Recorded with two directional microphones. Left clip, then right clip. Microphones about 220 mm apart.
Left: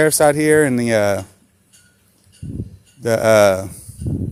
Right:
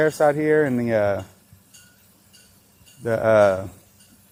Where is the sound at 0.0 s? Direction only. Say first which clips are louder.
Left 5 dB; 30° left (ahead or behind).